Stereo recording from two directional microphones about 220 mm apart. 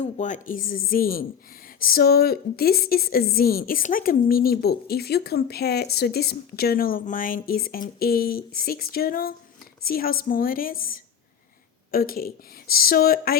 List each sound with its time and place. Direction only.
0.0 s a woman's voice: 35° left (ahead or behind)